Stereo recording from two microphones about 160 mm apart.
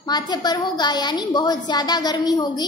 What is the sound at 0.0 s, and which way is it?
A woman's voice, 25° left (ahead or behind).